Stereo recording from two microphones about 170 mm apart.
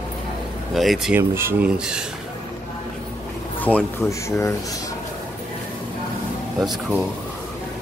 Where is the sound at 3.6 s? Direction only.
10° left (ahead or behind).